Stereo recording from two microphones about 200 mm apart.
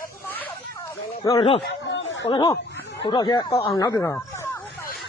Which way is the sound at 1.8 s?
65° left (ahead or behind).